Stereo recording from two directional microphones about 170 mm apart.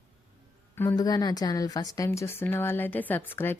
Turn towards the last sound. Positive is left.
turn(degrees=10)  # may be behind; listen again after turning